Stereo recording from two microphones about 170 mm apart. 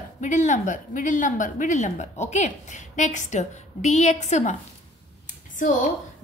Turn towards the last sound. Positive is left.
turn(degrees=50)  # may be behind; listen again after turning